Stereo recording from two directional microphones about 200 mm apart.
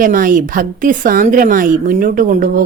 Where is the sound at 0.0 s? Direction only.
45° right (ahead or behind).